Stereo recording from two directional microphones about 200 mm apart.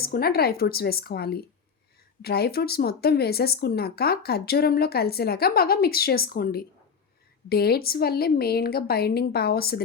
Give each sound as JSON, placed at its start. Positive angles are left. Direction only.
{"t": 0.0, "sound": "speech", "side_deg": 50}